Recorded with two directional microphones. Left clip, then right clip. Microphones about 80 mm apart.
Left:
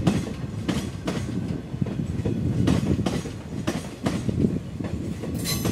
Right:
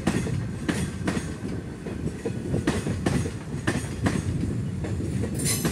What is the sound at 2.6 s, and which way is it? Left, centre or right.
Train, left.